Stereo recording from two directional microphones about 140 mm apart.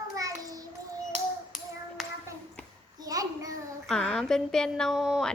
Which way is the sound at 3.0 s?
25° right (ahead or behind).